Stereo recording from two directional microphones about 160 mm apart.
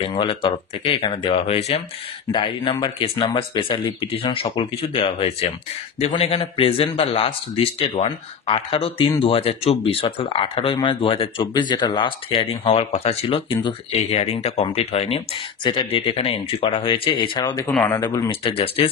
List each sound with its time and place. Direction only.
0.0 s speech: 35° left (ahead or behind)
2.3 s speech: 30° left (ahead or behind)
17.6 s speech: 10° left (ahead or behind)
18.0 s speech: 25° left (ahead or behind)
18.4 s speech: 35° left (ahead or behind)